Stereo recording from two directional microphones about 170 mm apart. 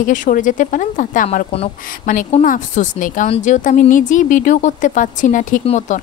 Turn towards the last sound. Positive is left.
turn(degrees=45)  # may be behind; listen again after turning